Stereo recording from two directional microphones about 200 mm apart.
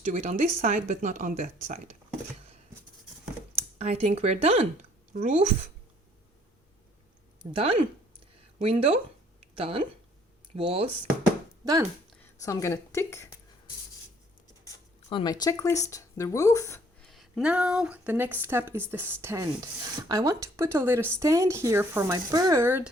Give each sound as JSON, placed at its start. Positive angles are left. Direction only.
{"t": 0.0, "sound": "speech", "side_deg": -35}
{"t": 3.8, "sound": "speech", "side_deg": -30}
{"t": 7.5, "sound": "speech", "side_deg": -30}
{"t": 9.4, "sound": "a sound", "side_deg": -30}
{"t": 10.5, "sound": "speech", "side_deg": -30}
{"t": 11.6, "sound": "speech", "side_deg": -20}
{"t": 12.4, "sound": "a woman's voice", "side_deg": 15}
{"t": 14.7, "sound": "speech", "side_deg": 20}
{"t": 17.0, "sound": "speech", "side_deg": 0}